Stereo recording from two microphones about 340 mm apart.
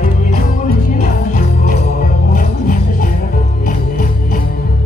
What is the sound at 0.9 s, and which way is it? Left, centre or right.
Music, left.